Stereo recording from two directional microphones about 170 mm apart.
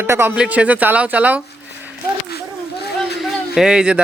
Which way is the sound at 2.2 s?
70° left (ahead or behind).